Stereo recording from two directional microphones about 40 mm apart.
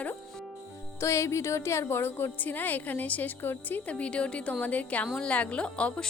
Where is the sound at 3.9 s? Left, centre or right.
Left.